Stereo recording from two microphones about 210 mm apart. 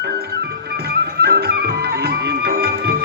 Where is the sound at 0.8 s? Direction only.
50° right (ahead or behind).